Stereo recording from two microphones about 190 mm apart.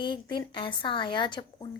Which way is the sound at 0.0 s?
25° left (ahead or behind).